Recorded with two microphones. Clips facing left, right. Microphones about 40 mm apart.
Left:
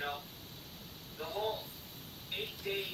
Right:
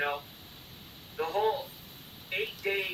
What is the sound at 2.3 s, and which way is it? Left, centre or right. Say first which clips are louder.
Speech: right 7 dB; right.